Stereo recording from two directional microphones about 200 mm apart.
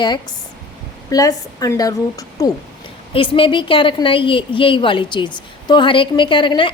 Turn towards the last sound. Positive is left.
turn(degrees=25)  # may be behind; listen again after turning